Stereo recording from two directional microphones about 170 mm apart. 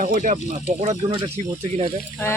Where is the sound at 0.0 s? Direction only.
50° right (ahead or behind).